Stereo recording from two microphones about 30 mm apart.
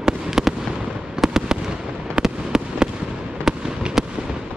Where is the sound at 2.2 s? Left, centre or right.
Right.